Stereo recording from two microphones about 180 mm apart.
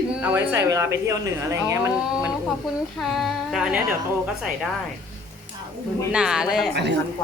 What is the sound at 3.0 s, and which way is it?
Speech, centre (ahead or behind).